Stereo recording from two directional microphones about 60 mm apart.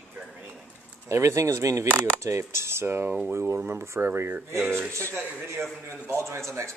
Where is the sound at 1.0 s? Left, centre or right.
Right.